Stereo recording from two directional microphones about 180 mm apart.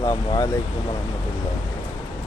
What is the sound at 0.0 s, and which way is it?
Speech, 20° left (ahead or behind).